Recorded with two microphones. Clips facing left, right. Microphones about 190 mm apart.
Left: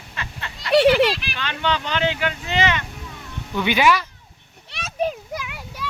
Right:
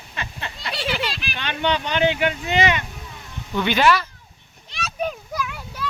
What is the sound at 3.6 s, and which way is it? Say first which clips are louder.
Speech: even; 10° left (ahead or behind).